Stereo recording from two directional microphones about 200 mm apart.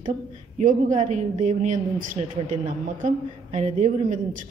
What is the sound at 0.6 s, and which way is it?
A woman's voice, 40° right (ahead or behind).